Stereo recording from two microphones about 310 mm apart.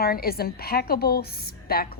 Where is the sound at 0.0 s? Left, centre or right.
Left.